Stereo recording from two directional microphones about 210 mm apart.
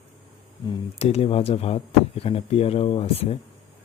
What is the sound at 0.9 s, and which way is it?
Speech, 30° left (ahead or behind).